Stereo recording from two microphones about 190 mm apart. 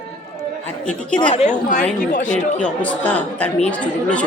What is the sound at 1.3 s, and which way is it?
A woman's voice, 40° left (ahead or behind).